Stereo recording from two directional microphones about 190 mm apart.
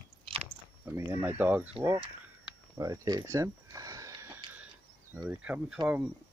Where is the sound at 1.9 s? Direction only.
20° right (ahead or behind).